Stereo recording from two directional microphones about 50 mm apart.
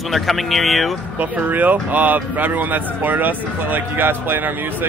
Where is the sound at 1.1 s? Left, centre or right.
Right.